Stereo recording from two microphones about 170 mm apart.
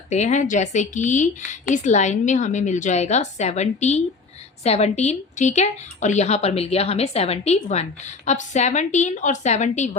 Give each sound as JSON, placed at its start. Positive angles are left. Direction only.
{"t": 0.1, "sound": "a woman's voice", "side_deg": 45}